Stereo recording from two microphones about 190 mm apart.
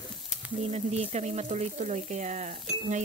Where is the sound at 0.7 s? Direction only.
35° right (ahead or behind).